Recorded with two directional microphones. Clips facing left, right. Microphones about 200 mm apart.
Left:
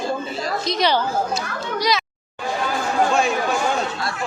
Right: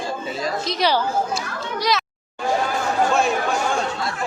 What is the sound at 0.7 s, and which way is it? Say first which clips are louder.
Speech: left 1 dB; 5° right (ahead or behind).